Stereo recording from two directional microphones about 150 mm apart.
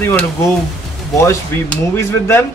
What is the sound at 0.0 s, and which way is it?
A man's voice, 15° left (ahead or behind).